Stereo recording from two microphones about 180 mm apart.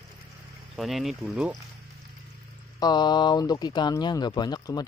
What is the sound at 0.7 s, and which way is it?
Speech, centre (ahead or behind).